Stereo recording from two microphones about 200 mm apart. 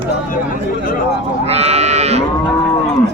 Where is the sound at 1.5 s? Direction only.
30° right (ahead or behind).